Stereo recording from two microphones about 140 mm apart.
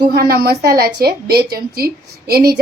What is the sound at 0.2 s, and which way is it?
A woman's voice, 90° right.